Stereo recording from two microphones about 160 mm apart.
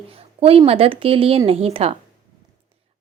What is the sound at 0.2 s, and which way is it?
Speech, 35° right (ahead or behind).